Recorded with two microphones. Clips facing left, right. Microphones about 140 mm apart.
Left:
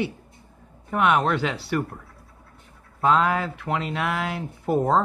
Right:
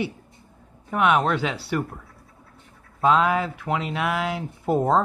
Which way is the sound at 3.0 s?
10° right (ahead or behind).